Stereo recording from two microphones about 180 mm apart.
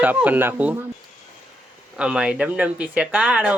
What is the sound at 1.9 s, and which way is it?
Speech, 5° right (ahead or behind).